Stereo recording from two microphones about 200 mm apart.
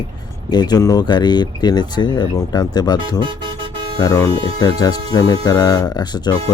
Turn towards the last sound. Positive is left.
turn(degrees=20)  # may be behind; listen again after turning